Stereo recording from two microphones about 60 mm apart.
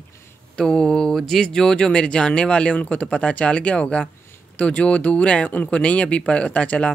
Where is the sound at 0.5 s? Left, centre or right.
Centre.